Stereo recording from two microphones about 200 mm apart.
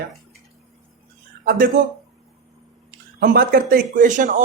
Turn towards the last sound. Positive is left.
turn(degrees=-40)  # may be behind; listen again after turning